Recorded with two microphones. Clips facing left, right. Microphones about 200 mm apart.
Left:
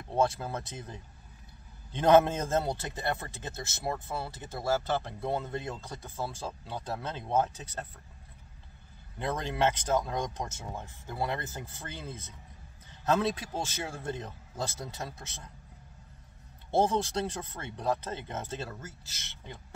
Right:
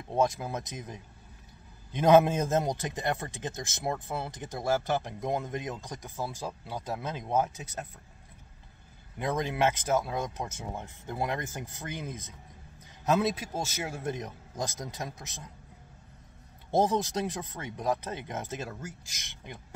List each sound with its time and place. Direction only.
0.1 s a man's voice: 15° right (ahead or behind)
9.2 s a man's voice: 10° right (ahead or behind)
16.7 s a man's voice: 15° right (ahead or behind)